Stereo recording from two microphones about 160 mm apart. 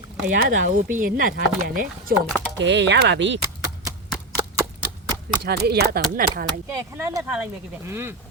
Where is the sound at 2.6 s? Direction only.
90° right.